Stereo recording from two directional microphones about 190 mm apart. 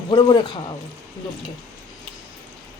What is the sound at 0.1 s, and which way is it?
Speech, 25° left (ahead or behind).